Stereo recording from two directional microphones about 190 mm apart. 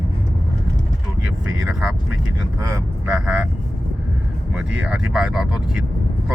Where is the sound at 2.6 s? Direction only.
15° right (ahead or behind).